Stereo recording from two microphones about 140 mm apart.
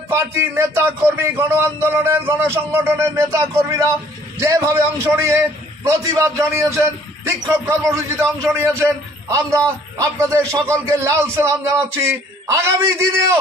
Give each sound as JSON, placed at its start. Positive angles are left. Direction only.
{"t": 0.1, "sound": "a man's voice", "side_deg": -20}